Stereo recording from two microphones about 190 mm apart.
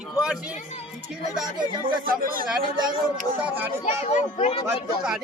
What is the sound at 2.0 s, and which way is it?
Speech, 50° right (ahead or behind).